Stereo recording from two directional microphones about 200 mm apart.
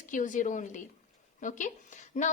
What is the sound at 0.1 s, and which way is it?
A woman's voice, 40° left (ahead or behind).